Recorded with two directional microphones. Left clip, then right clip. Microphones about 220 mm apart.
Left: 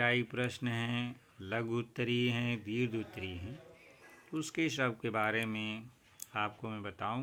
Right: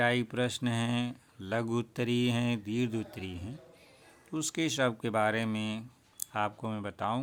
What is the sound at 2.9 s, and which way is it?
Speech, 40° right (ahead or behind).